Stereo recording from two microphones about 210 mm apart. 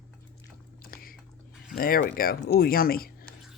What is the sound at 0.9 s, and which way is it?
Biting, 45° left (ahead or behind).